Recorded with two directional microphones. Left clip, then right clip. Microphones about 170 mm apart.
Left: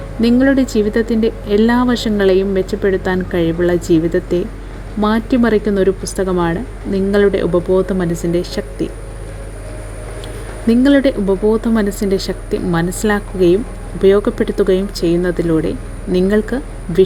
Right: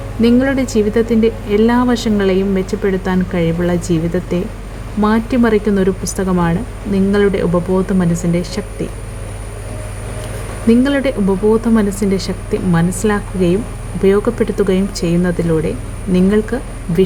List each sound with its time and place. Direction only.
0.2 s speech: 35° left (ahead or behind)
10.7 s speech: 35° left (ahead or behind)